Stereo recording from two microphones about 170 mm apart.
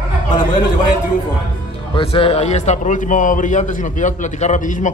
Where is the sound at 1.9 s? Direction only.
30° left (ahead or behind).